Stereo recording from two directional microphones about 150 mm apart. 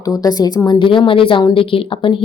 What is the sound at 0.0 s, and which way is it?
Speech, 25° left (ahead or behind).